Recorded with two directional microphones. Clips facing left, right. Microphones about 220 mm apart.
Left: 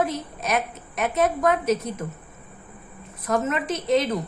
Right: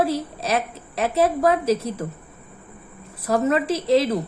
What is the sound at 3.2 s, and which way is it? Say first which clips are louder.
Speech: right 4 dB; 30° right (ahead or behind).